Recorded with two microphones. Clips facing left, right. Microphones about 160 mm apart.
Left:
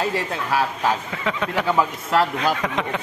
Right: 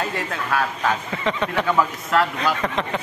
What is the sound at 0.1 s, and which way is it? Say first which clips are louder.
Speech: left 1 dB; 30° left (ahead or behind).